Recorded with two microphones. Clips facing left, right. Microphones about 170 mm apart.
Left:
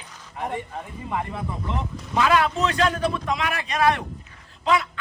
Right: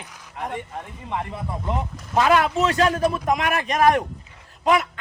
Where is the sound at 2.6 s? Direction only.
40° right (ahead or behind).